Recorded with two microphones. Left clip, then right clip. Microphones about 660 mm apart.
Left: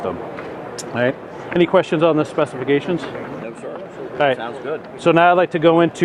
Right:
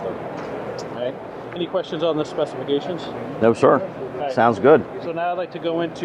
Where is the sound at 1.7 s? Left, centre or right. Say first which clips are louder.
Left 7 dB; left.